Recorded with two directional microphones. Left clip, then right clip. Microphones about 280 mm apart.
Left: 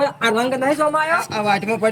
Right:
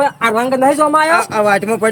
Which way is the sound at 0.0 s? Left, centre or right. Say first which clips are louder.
Right 4 dB; centre.